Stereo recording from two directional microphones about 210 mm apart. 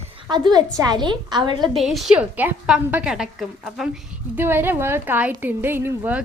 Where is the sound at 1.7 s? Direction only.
Centre (ahead or behind).